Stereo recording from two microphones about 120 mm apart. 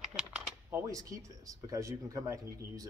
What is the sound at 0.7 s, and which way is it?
Speech, 30° right (ahead or behind).